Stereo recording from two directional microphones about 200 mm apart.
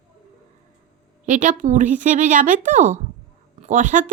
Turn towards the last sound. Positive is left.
turn(degrees=-40)  # may be behind; listen again after turning